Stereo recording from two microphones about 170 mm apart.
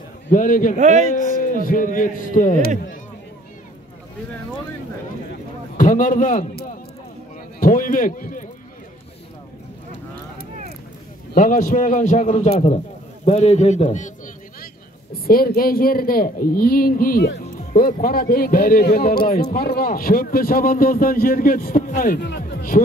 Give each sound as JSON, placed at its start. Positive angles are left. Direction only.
{"t": 0.3, "sound": "a man's voice", "side_deg": 50}
{"t": 0.7, "sound": "speech", "side_deg": -45}
{"t": 1.1, "sound": "a man's voice", "side_deg": 55}
{"t": 5.8, "sound": "a man's voice", "side_deg": 50}
{"t": 7.6, "sound": "a man's voice", "side_deg": 55}
{"t": 11.3, "sound": "a man's voice", "side_deg": 50}
{"t": 15.2, "sound": "a man's voice", "side_deg": 60}